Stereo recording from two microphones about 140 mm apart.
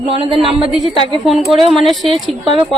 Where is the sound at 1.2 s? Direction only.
Centre (ahead or behind).